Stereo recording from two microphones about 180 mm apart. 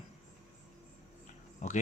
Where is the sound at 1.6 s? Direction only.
45° left (ahead or behind).